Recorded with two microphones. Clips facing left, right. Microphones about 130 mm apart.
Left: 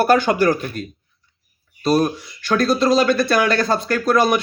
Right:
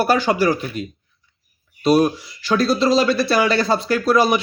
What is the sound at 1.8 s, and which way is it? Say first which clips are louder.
Speech: right 2 dB; 10° right (ahead or behind).